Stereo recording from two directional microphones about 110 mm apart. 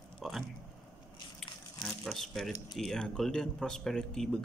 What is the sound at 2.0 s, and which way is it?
Speech, centre (ahead or behind).